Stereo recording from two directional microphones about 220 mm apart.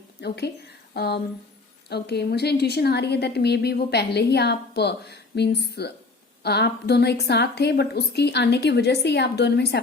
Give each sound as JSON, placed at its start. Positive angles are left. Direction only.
{"t": 0.2, "sound": "a woman's voice", "side_deg": 50}